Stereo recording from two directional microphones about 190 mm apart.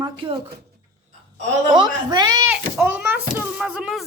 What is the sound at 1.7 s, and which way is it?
Speech, 20° right (ahead or behind).